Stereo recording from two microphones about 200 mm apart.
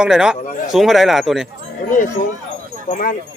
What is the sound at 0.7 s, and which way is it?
Speech, centre (ahead or behind).